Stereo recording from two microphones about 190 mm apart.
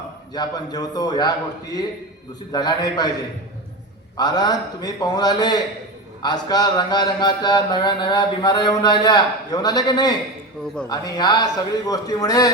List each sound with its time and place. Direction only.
0.3 s speech: 20° left (ahead or behind)
4.2 s speech: 20° left (ahead or behind)